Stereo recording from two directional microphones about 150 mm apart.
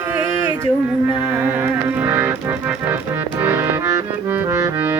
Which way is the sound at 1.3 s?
10° right (ahead or behind).